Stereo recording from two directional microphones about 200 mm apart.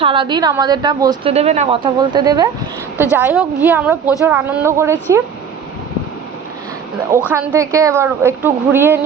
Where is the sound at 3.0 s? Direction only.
10° right (ahead or behind).